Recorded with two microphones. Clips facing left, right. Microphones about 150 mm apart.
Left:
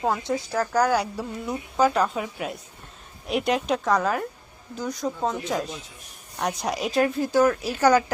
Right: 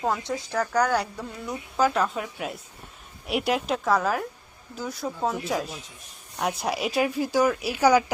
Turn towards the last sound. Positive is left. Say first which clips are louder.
# even
turn(degrees=-10)  # may be behind; listen again after turning